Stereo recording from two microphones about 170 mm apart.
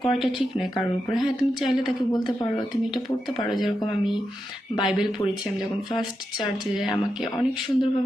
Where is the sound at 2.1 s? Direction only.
25° left (ahead or behind).